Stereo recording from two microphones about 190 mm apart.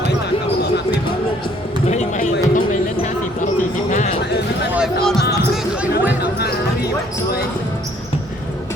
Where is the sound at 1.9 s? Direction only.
40° left (ahead or behind).